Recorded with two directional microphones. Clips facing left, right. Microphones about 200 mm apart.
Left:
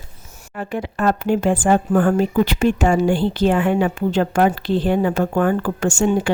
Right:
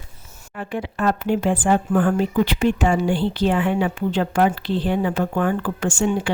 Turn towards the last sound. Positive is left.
turn(degrees=45)  # may be behind; listen again after turning